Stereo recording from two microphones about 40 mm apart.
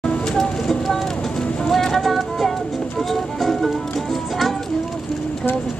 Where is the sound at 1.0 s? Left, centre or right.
Centre.